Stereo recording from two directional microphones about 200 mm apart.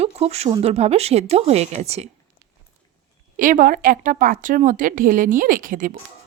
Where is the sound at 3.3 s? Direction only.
40° right (ahead or behind).